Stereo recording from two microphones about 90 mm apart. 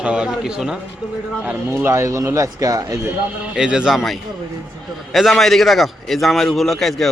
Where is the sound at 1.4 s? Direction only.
25° right (ahead or behind).